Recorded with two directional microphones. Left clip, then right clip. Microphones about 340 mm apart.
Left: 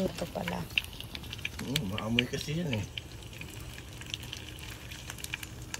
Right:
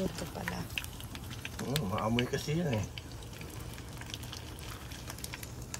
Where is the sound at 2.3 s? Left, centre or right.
Right.